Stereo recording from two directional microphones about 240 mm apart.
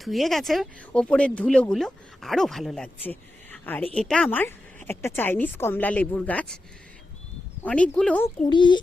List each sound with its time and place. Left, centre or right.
0.0 s speech: centre
3.1 s a sound: centre
3.9 s a woman's voice: centre
7.6 s speech: centre
8.4 s a child's voice: centre